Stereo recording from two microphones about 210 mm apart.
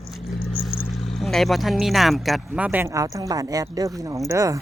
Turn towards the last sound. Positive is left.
turn(degrees=-15)  # may be behind; listen again after turning